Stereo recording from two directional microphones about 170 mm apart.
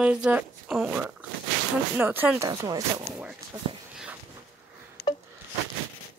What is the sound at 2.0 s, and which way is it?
Speech, 15° right (ahead or behind).